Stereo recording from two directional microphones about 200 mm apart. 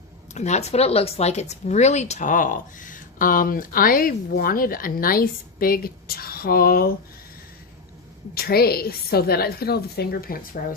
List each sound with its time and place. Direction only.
0.3 s speech: 35° left (ahead or behind)
8.4 s speech: 50° left (ahead or behind)